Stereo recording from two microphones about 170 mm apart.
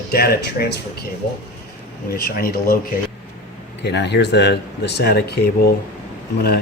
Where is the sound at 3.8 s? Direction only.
85° left.